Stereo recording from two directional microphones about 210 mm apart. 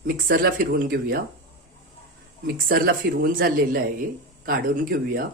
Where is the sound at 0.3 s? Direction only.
45° right (ahead or behind).